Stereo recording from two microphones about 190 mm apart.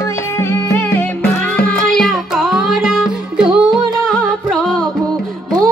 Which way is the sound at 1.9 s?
Centre (ahead or behind).